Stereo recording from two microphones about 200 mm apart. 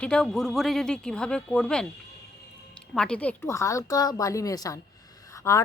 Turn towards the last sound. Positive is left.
turn(degrees=15)  # may be behind; listen again after turning